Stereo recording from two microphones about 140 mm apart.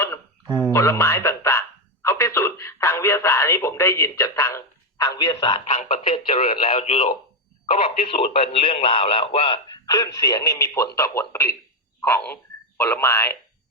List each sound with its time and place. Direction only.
0.7 s speech: 20° left (ahead or behind)
5.5 s speech: 45° left (ahead or behind); by 13.3 s 15° left (ahead or behind)